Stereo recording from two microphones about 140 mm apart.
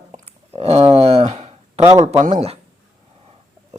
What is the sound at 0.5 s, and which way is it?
Speech, 50° right (ahead or behind).